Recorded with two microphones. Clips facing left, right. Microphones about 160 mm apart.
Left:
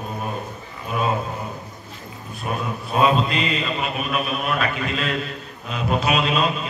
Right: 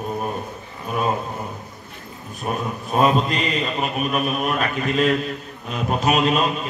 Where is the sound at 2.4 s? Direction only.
40° right (ahead or behind).